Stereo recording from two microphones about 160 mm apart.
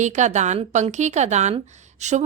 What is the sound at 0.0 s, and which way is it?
A woman's voice, 50° right (ahead or behind).